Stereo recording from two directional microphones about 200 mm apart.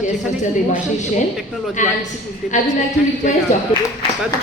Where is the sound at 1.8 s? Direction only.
40° left (ahead or behind).